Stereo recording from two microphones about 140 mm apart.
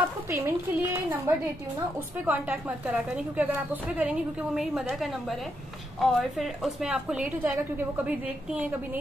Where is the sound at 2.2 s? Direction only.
10° right (ahead or behind).